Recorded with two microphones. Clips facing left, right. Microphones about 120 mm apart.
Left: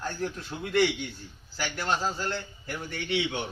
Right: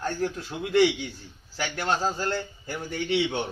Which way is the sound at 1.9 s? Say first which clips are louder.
Right 3 dB; 35° right (ahead or behind).